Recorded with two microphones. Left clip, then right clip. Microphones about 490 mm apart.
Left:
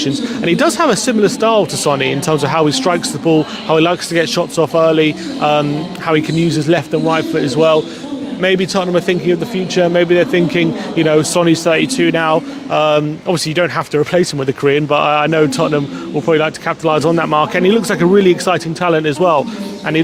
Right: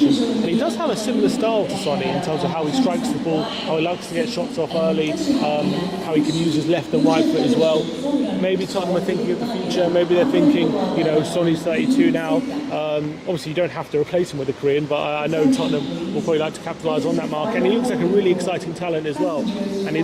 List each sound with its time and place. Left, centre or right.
0.4 s speech: left
6.7 s a man's voice: left